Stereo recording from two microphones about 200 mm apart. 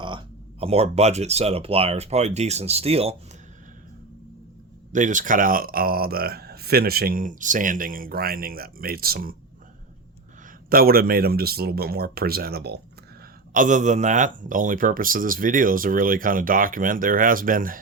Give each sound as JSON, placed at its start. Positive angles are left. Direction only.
{"t": 0.0, "sound": "speech", "side_deg": -25}
{"t": 4.9, "sound": "speech", "side_deg": -40}
{"t": 10.7, "sound": "speech", "side_deg": -45}
{"t": 13.5, "sound": "speech", "side_deg": -40}